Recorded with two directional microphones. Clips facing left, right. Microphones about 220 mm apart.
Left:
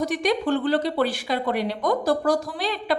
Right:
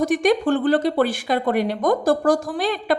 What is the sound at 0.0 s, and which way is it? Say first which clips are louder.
Speech: right 5 dB; 50° right (ahead or behind).